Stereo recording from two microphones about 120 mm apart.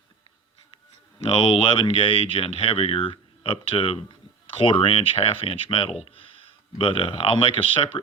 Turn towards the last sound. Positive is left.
turn(degrees=50)  # may be behind; listen again after turning